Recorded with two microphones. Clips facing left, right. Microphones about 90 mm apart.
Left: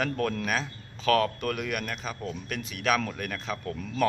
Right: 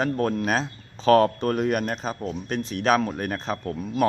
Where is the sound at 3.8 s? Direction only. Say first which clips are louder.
Right 4 dB; 20° right (ahead or behind).